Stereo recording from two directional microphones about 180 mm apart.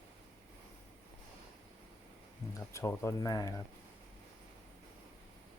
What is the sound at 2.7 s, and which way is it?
Speech, 15° left (ahead or behind).